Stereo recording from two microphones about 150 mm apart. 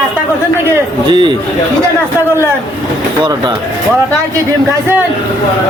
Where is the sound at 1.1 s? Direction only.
30° right (ahead or behind).